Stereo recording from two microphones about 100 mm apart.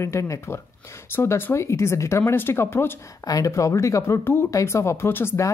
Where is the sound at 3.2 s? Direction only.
35° left (ahead or behind).